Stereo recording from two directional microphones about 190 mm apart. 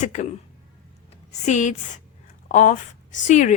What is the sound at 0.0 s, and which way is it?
Speech, 40° left (ahead or behind).